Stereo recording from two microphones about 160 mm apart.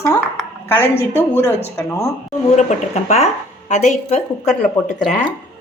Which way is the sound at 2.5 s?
45° left (ahead or behind).